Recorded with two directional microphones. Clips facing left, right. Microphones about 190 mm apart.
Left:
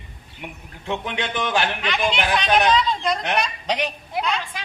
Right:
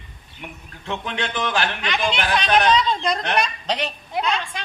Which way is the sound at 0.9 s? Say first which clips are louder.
Left 1 dB; 15° left (ahead or behind).